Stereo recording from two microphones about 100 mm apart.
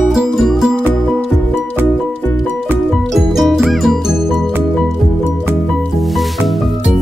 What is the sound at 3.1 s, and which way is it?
Music, 5° right (ahead or behind).